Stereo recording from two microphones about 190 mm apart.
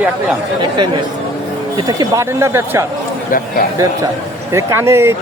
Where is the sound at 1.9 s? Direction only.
15° right (ahead or behind).